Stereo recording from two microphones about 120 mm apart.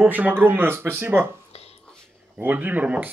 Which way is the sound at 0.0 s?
15° right (ahead or behind).